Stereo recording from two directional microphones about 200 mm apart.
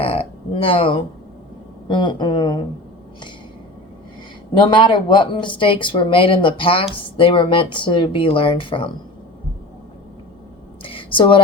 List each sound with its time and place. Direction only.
0.0 s speech: 30° left (ahead or behind)
4.5 s speech: 25° left (ahead or behind)
10.8 s a sound: 25° left (ahead or behind)